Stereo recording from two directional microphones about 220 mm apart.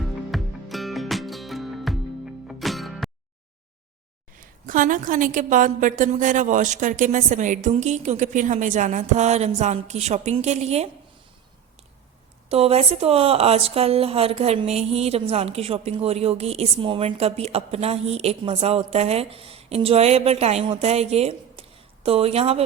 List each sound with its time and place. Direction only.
0.3 s music: centre (ahead or behind)
4.6 s a woman's voice: 40° right (ahead or behind)
12.5 s speech: 25° right (ahead or behind)